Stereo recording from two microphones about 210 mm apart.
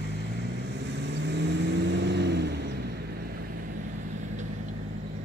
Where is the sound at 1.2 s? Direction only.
55° right (ahead or behind).